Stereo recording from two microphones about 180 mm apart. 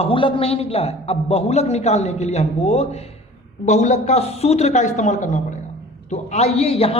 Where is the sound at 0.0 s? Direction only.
30° left (ahead or behind).